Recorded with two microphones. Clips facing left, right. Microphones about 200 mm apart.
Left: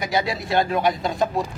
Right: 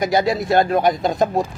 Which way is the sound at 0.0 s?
45° right (ahead or behind).